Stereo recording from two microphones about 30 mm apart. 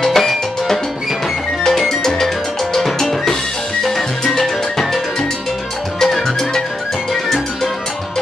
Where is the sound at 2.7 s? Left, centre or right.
Centre.